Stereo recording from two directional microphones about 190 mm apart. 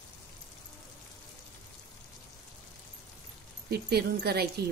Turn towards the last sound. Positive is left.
turn(degrees=-55)  # may be behind; listen again after turning